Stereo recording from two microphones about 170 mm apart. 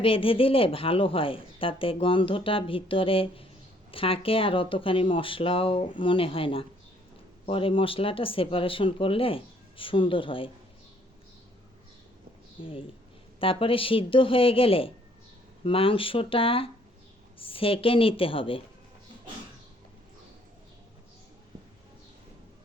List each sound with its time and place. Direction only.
0.0 s a woman's voice: 30° left (ahead or behind)
12.6 s a woman's voice: 30° left (ahead or behind)